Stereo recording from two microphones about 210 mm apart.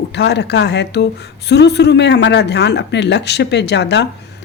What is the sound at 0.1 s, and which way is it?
A woman's voice, 55° left (ahead or behind).